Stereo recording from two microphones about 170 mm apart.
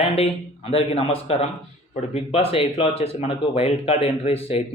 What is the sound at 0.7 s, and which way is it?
Speech, 35° left (ahead or behind).